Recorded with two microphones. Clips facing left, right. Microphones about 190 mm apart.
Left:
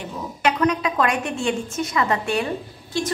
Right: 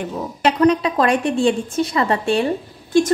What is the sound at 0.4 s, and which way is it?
A woman's voice, 30° right (ahead or behind).